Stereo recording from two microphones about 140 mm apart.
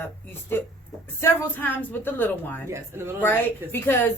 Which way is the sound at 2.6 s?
20° right (ahead or behind).